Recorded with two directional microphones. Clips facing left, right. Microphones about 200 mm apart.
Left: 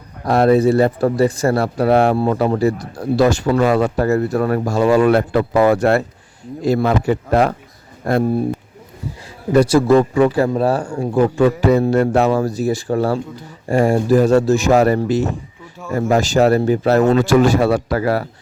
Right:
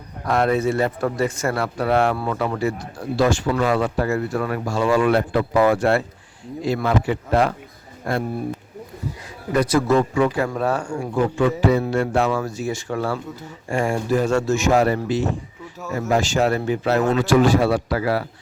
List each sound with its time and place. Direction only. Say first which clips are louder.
0.3 s speech: left 7 dB; 35° left (ahead or behind)
9.5 s speech: left 6 dB; 30° left (ahead or behind); by 18.3 s 45° left (ahead or behind)